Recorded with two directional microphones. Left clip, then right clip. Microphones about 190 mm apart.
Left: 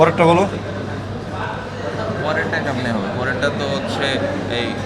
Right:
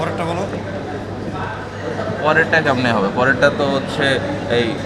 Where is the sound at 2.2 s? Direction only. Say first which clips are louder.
Right 7 dB; 20° left (ahead or behind).